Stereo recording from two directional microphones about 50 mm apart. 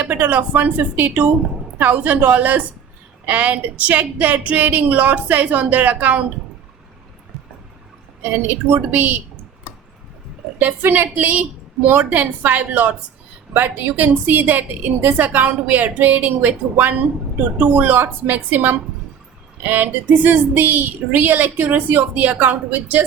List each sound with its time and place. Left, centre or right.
0.0 s speech: right
8.2 s speech: right
10.6 s speech: right